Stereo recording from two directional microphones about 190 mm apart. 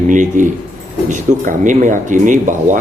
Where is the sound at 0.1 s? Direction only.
40° right (ahead or behind).